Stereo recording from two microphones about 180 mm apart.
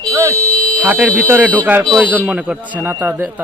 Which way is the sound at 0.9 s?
10° right (ahead or behind).